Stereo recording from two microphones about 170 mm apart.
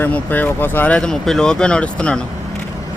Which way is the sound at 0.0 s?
10° left (ahead or behind).